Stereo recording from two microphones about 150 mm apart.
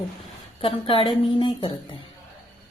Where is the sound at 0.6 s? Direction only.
40° left (ahead or behind).